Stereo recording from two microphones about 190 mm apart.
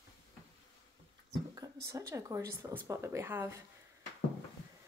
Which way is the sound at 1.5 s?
20° right (ahead or behind).